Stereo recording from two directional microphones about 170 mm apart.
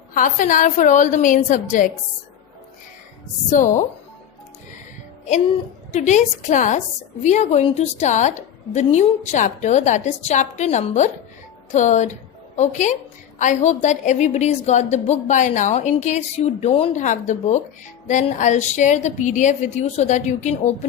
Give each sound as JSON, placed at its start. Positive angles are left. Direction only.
{"t": 0.1, "sound": "a woman's voice", "side_deg": 50}
{"t": 3.5, "sound": "a woman's voice", "side_deg": 50}
{"t": 5.9, "sound": "a woman's voice", "side_deg": 45}